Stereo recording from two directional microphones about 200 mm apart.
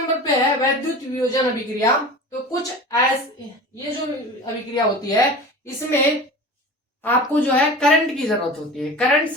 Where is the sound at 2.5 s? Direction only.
15° left (ahead or behind).